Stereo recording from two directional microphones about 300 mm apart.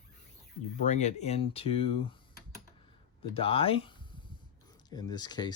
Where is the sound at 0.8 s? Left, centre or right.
Left.